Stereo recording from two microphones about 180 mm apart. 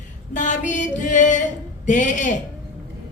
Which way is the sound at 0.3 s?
45° left (ahead or behind).